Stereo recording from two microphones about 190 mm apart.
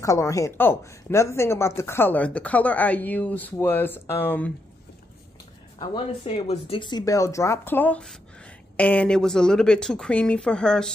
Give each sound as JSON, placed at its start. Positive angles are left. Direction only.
{"t": 0.0, "sound": "speech", "side_deg": 15}
{"t": 5.8, "sound": "speech", "side_deg": 30}